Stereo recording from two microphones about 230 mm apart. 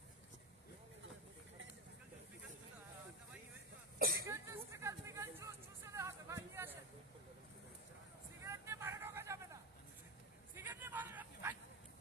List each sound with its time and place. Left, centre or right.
3.9 s cough: right
4.3 s hubbub: centre
8.4 s vehicle: centre
10.5 s a sound: centre